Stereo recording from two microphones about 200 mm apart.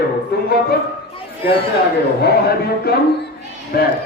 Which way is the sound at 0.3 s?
55° left (ahead or behind).